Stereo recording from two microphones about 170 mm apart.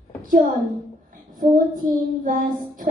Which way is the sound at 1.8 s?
55° right (ahead or behind).